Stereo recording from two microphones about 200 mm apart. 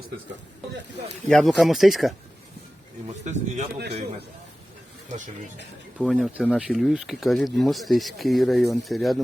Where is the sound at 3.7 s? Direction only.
55° right (ahead or behind).